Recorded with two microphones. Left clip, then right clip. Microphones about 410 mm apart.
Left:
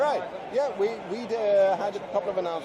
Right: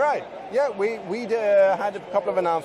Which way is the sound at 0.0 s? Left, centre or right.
Right.